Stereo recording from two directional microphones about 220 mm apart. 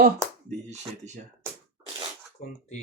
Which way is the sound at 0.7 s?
30° right (ahead or behind).